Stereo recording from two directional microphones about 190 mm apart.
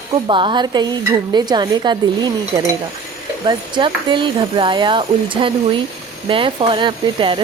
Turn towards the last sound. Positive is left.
turn(degrees=-25)  # may be behind; listen again after turning